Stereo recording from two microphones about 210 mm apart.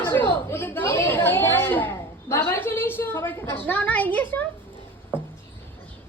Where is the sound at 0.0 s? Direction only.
10° left (ahead or behind).